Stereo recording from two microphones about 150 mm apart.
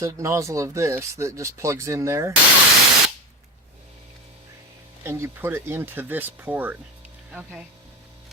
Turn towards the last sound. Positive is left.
turn(degrees=-5)  # may be behind; listen again after turning